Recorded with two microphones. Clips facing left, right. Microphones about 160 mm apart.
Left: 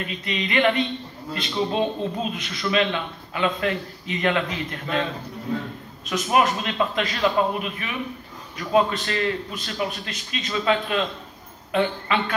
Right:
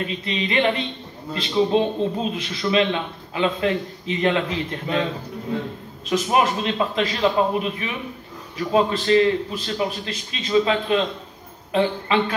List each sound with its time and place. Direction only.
0.0 s a man's voice: 30° right (ahead or behind)
6.0 s a man's voice: 30° right (ahead or behind)